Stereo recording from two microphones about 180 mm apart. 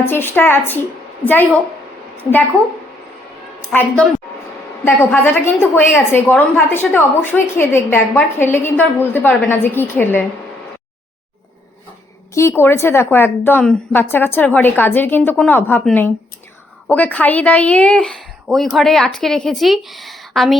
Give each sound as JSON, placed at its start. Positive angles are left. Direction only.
{"t": 0.0, "sound": "a woman's voice", "side_deg": 10}
{"t": 3.7, "sound": "a woman's voice", "side_deg": 10}
{"t": 12.3, "sound": "a woman's voice", "side_deg": 15}